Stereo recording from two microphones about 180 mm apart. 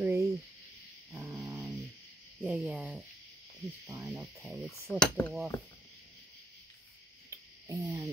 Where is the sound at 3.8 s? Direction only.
15° right (ahead or behind).